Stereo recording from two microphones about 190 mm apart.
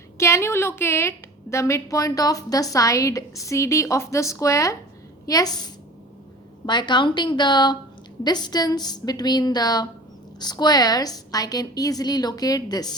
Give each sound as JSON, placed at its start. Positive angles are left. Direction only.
{"t": 0.2, "sound": "a woman's voice", "side_deg": 15}